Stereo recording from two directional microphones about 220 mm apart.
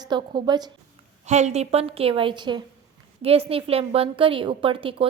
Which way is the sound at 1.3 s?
30° right (ahead or behind).